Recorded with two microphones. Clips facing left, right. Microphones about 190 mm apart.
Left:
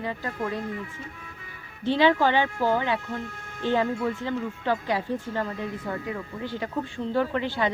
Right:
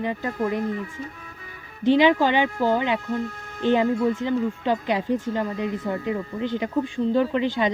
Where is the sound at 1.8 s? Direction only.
15° right (ahead or behind).